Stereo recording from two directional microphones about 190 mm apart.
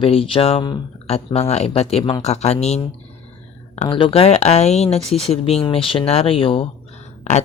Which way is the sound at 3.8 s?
30° left (ahead or behind).